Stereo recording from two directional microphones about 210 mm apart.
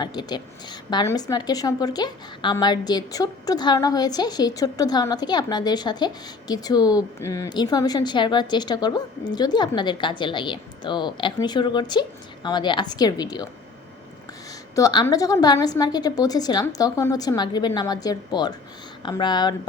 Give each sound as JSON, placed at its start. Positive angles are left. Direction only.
{"t": 0.0, "sound": "a woman's voice", "side_deg": 20}
{"t": 14.8, "sound": "a woman's voice", "side_deg": 15}